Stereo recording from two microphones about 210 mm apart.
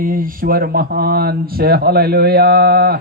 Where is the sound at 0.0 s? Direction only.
40° right (ahead or behind).